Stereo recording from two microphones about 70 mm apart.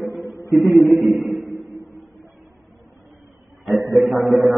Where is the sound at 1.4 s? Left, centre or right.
Left.